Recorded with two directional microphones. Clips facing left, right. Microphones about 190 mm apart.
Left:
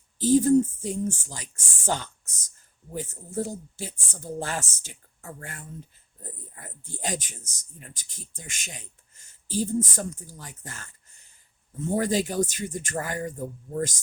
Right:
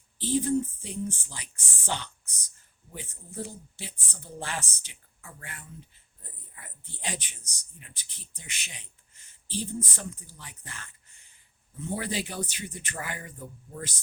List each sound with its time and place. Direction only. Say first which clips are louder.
0.2 s speech: left 8 dB; 45° left (ahead or behind)